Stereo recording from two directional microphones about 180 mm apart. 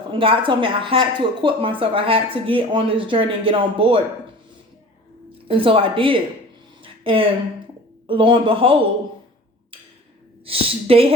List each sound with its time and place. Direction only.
0.1 s speech: 30° right (ahead or behind)
5.5 s speech: 30° right (ahead or behind)
6.8 s a sound: 30° right (ahead or behind)
8.0 s speech: 30° right (ahead or behind)
10.4 s a woman's voice: 30° right (ahead or behind)